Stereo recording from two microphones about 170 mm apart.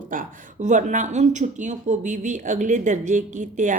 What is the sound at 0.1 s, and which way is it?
A woman's voice, 50° right (ahead or behind).